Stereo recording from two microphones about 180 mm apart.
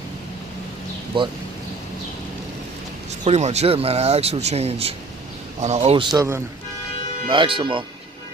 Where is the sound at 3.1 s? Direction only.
40° right (ahead or behind).